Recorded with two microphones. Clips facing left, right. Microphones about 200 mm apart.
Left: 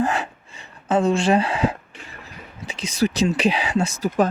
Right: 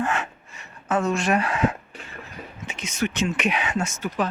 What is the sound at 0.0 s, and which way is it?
Gasp, 35° left (ahead or behind).